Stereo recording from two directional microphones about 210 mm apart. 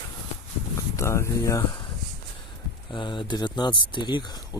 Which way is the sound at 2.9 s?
20° left (ahead or behind).